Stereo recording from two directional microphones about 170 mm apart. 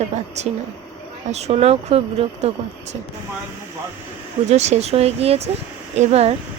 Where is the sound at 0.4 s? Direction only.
40° right (ahead or behind).